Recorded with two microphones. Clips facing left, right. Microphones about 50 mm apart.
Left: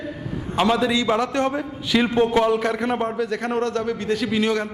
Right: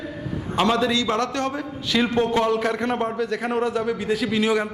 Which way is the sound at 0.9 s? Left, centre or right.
Centre.